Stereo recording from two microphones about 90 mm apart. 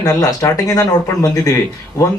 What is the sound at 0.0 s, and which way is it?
Speech, 45° left (ahead or behind).